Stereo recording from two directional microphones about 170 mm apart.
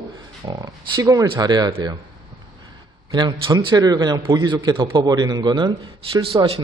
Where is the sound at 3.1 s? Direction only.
25° right (ahead or behind).